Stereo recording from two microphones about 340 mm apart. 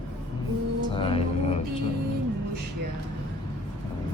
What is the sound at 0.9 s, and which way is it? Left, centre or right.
Music, centre.